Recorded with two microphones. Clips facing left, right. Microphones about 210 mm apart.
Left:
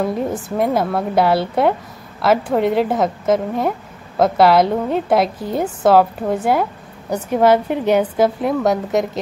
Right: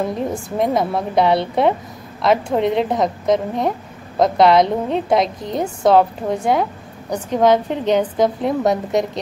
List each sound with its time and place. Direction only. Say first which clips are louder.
0.6 s a woman's voice: even; 5° left (ahead or behind)